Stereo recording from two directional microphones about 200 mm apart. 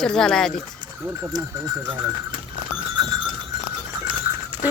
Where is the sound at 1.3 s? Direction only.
20° right (ahead or behind).